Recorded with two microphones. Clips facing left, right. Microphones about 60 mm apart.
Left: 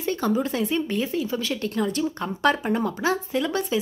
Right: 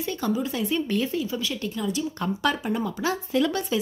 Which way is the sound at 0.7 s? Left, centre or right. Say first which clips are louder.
Even; left.